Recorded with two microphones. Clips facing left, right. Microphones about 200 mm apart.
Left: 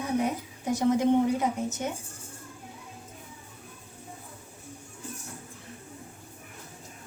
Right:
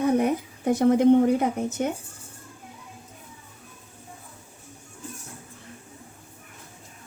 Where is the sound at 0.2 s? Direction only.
55° right (ahead or behind).